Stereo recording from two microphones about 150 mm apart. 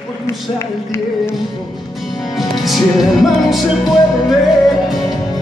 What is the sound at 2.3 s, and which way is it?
Music, centre (ahead or behind).